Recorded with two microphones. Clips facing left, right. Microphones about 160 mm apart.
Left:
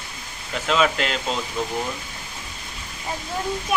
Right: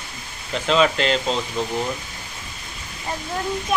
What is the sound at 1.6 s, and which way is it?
Speech, 25° right (ahead or behind).